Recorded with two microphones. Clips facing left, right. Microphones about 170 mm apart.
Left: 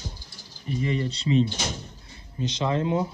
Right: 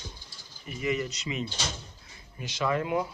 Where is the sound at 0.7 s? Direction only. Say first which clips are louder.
Left 3 dB; 35° left (ahead or behind).